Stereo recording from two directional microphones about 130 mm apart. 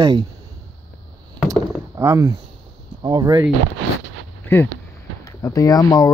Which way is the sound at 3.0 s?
30° right (ahead or behind).